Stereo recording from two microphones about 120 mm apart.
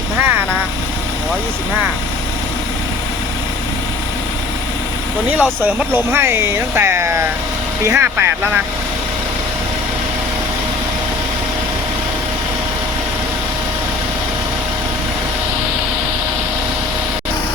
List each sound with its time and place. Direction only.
0.2 s speech: 20° right (ahead or behind)
5.4 s speech: 15° right (ahead or behind)